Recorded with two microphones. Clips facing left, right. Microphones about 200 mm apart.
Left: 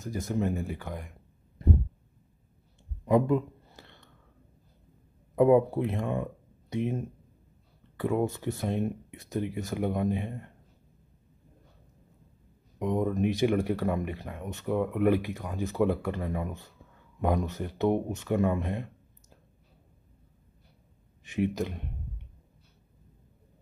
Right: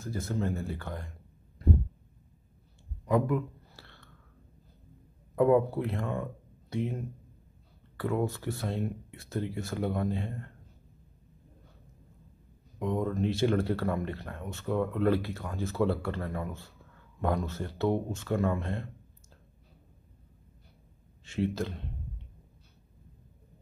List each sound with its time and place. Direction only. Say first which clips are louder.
0.0 s speech: left 3 dB; 15° left (ahead or behind)
3.1 s a sound: left 3 dB; 20° left (ahead or behind)
5.3 s speech: left 3 dB; 20° left (ahead or behind)
12.7 s speech: left 2 dB; 15° left (ahead or behind)
21.2 s speech: left 2 dB; 15° left (ahead or behind)